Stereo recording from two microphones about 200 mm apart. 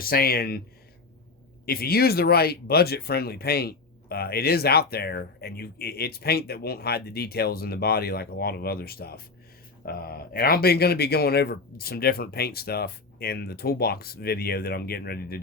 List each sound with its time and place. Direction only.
0.0 s speech: 50° left (ahead or behind)
1.6 s speech: 50° left (ahead or behind)